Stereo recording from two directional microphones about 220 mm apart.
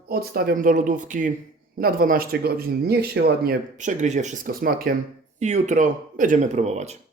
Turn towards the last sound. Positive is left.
turn(degrees=-30)  # may be behind; listen again after turning